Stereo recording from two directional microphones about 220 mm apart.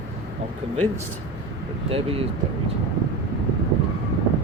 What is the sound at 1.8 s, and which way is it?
Speech, 25° right (ahead or behind).